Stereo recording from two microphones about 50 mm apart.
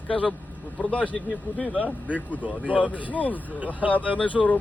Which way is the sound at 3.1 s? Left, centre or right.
Left.